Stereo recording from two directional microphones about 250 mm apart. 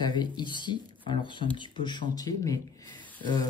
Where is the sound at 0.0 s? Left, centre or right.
Centre.